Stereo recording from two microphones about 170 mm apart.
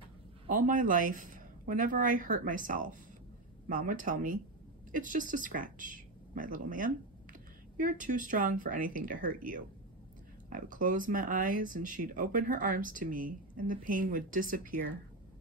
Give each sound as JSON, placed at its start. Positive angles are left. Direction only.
{"t": 0.5, "sound": "speech", "side_deg": -55}